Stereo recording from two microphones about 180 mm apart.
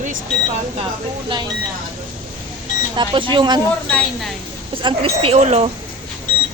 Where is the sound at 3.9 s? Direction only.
5° left (ahead or behind).